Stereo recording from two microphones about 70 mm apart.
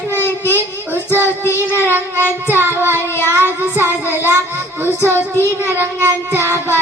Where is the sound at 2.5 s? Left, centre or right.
Right.